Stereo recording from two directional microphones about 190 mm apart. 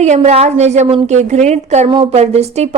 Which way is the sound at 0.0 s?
35° right (ahead or behind).